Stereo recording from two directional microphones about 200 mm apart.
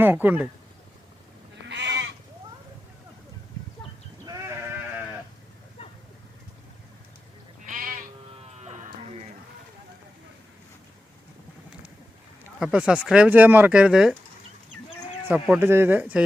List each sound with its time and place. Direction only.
0.0 s speech: 10° right (ahead or behind)
1.6 s goat: 60° right (ahead or behind)
4.3 s sheep: 10° right (ahead or behind)
7.7 s sheep: 45° right (ahead or behind)
12.5 s speech: 5° right (ahead or behind)
15.4 s speech: 10° right (ahead or behind)